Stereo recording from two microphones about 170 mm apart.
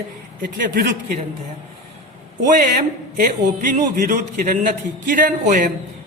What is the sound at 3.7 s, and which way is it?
A woman's voice, 50° right (ahead or behind).